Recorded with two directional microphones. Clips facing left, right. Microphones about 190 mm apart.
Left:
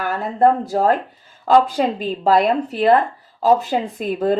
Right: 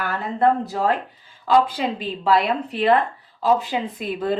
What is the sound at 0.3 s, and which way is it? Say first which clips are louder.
Speech: left 4 dB; 45° left (ahead or behind).